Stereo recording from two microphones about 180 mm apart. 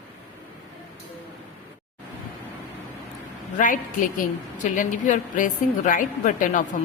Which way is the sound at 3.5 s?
45° left (ahead or behind).